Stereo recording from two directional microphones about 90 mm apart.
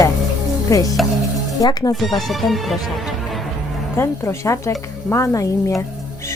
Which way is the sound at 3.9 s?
30° left (ahead or behind).